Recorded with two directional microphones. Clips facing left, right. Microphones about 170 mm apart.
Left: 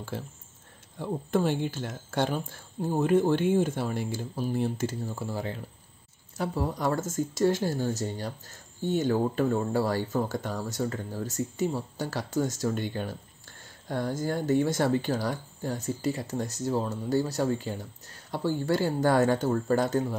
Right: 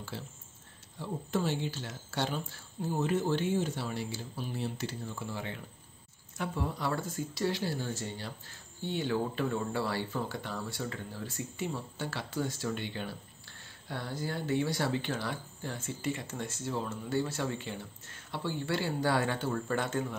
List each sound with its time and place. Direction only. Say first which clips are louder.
0.1 s speech: left 6 dB; 50° left (ahead or behind)